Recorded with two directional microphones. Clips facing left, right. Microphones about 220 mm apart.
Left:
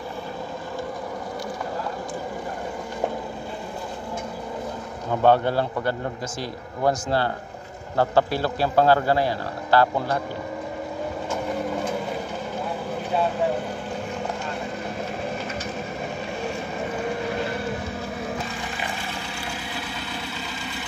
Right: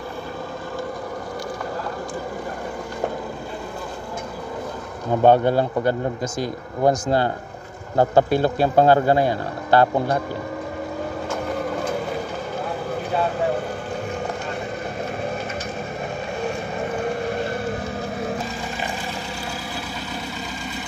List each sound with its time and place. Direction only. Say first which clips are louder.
5.2 s a man's voice: right 3 dB; 15° right (ahead or behind)